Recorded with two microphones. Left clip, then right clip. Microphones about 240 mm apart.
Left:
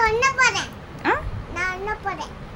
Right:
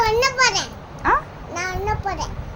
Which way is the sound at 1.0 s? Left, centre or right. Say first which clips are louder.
Right 4 dB; left.